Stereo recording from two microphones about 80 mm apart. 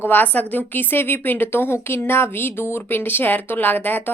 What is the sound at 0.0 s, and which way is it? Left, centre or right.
Speech, left.